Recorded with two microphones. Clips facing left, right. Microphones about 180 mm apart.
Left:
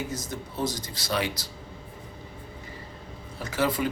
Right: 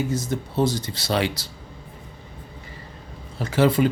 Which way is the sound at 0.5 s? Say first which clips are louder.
Right 8 dB; 30° right (ahead or behind).